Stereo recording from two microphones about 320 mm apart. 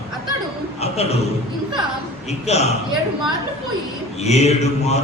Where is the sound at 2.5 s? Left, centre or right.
Centre.